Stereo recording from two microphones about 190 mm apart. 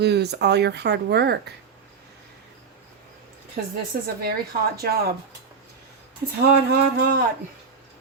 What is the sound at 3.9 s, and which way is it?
Speech, 50° right (ahead or behind).